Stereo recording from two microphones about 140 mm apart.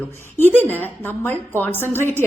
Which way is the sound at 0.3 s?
15° left (ahead or behind).